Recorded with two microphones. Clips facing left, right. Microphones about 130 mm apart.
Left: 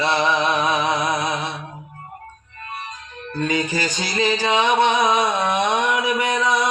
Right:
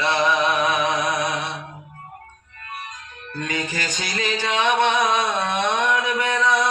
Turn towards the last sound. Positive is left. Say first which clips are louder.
# left 1 dB
turn(degrees=15)  # may be behind; listen again after turning